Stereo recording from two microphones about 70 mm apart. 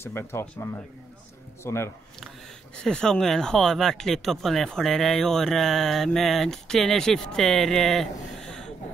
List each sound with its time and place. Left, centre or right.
0.0 s speech: left
2.1 s speech: centre